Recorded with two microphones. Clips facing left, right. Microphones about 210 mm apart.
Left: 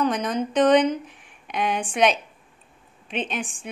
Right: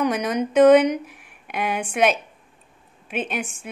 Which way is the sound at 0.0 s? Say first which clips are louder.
Right 1 dB; 10° right (ahead or behind).